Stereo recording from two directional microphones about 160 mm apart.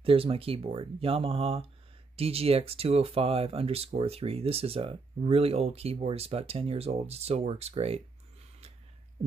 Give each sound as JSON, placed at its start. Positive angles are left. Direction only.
{"t": 0.0, "sound": "speech", "side_deg": -35}